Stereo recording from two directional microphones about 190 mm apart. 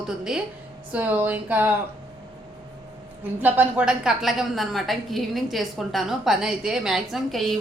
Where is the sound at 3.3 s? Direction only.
10° right (ahead or behind).